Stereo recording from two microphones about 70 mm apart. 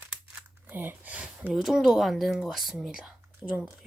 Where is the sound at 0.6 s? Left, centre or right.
Right.